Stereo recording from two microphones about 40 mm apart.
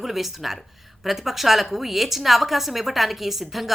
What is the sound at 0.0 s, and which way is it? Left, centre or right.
A woman's voice, centre.